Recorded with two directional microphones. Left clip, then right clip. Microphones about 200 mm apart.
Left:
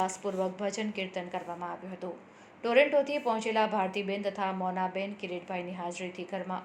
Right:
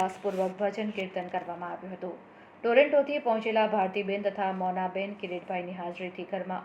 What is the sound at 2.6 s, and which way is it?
A woman's voice, 30° left (ahead or behind).